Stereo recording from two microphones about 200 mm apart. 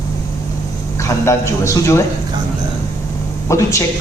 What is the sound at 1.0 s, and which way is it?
A man's voice, 15° left (ahead or behind).